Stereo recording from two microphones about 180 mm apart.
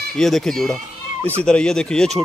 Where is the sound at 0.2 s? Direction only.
Centre (ahead or behind).